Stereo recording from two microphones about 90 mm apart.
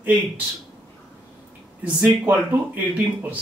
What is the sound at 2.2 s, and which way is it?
Speech, 20° right (ahead or behind).